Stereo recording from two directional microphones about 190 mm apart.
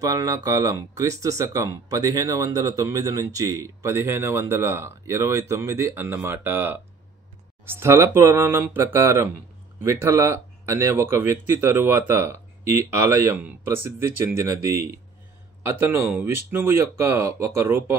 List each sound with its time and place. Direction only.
0.0 s speech: 20° right (ahead or behind)